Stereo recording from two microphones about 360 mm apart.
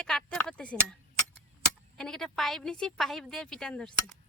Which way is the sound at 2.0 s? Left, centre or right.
Centre.